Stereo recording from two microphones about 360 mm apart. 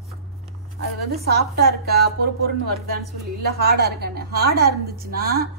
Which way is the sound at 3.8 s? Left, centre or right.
Right.